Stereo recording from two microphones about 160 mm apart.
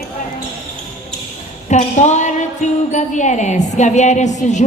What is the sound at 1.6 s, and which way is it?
A woman's voice, 45° left (ahead or behind).